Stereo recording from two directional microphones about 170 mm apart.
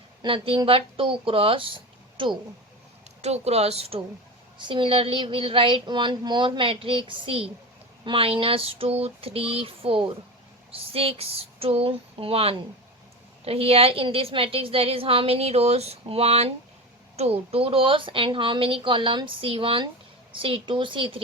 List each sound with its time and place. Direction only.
0.2 s a woman's voice: 30° right (ahead or behind)